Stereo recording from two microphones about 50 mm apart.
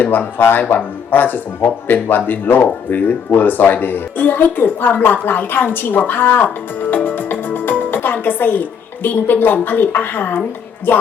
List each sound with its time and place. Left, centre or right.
0.0 s speech: left
6.9 s music: left
9.0 s a woman's voice: left